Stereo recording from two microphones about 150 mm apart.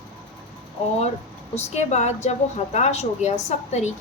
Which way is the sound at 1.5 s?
45° left (ahead or behind).